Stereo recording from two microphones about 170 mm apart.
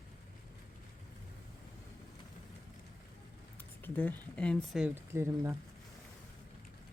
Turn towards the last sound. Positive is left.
turn(degrees=-15)  # may be behind; listen again after turning